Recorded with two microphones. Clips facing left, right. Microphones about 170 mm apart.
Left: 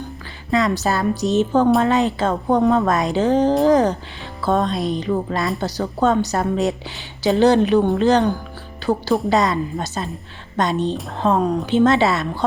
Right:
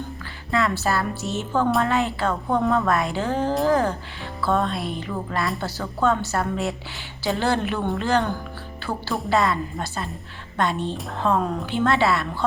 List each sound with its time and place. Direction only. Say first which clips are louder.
0.5 s speech: left 4 dB; 20° left (ahead or behind)